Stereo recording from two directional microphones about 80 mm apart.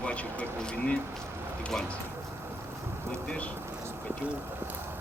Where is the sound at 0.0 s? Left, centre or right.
Centre.